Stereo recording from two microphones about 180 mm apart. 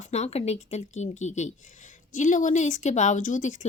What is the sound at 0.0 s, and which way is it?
A woman's voice, 40° left (ahead or behind).